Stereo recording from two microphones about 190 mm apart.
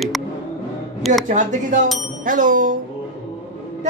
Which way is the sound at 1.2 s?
40° right (ahead or behind).